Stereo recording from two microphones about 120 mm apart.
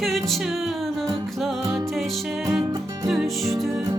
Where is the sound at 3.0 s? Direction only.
Centre (ahead or behind).